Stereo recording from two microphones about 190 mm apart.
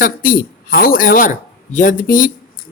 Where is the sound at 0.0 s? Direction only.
45° left (ahead or behind).